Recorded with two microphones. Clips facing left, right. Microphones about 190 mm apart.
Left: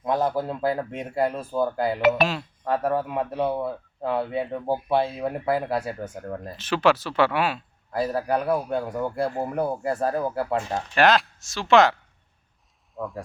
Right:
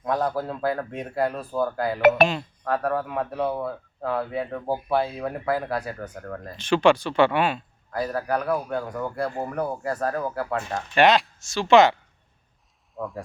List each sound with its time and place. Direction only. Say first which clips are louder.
0.0 s speech: left 1 dB; 20° left (ahead or behind)
2.0 s speech: right 4 dB; 50° right (ahead or behind)
2.2 s speech: right 3 dB; centre (ahead or behind)
2.6 s speech: left 1 dB; 20° left (ahead or behind)
6.6 s speech: right 3 dB; 5° left (ahead or behind)
7.9 s speech: left 2 dB; 25° left (ahead or behind)
10.9 s speech: right 1 dB; centre (ahead or behind)
13.0 s speech: even; centre (ahead or behind)